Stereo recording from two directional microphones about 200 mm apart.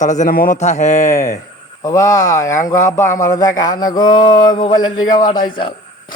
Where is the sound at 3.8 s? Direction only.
20° left (ahead or behind).